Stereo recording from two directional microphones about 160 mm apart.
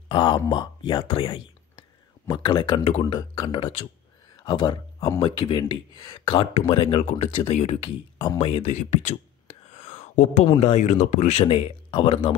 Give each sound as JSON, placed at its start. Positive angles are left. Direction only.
{"t": 0.1, "sound": "speech", "side_deg": 30}
{"t": 8.7, "sound": "speech", "side_deg": 45}
{"t": 9.7, "sound": "whispering", "side_deg": 45}
{"t": 10.4, "sound": "speech", "side_deg": 40}